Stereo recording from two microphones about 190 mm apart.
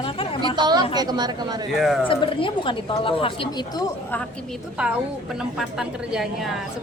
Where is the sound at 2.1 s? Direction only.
25° left (ahead or behind).